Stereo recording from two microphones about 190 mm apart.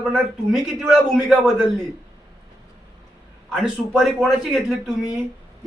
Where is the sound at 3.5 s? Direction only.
Centre (ahead or behind).